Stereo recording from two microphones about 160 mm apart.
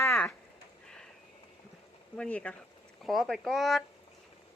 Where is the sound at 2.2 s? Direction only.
5° left (ahead or behind).